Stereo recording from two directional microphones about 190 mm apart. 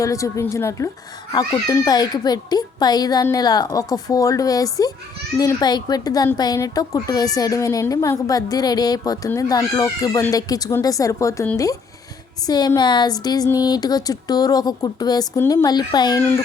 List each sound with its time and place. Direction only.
0.0 s a woman's voice: 15° left (ahead or behind)